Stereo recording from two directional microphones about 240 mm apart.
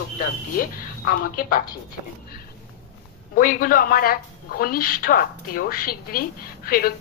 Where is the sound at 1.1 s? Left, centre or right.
Left.